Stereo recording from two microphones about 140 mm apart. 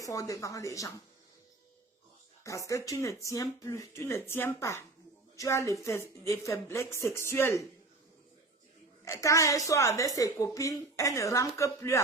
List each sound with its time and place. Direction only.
0.0 s a woman's voice: 25° left (ahead or behind)
2.4 s a woman's voice: 20° left (ahead or behind)
9.0 s a woman's voice: 20° left (ahead or behind)